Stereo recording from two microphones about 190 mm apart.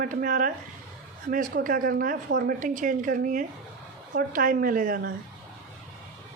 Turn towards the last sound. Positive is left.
turn(degrees=-50)  # may be behind; listen again after turning